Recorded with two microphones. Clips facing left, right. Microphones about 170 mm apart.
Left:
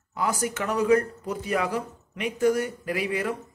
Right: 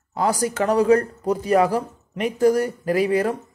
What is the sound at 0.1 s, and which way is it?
Speech, 35° right (ahead or behind).